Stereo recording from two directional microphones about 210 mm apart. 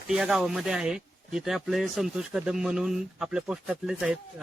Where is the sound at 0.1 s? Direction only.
Centre (ahead or behind).